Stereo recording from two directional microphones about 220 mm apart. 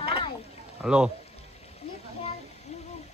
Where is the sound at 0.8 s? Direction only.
5° right (ahead or behind).